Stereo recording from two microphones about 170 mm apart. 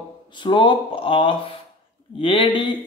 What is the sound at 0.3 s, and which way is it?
Speech, 30° left (ahead or behind).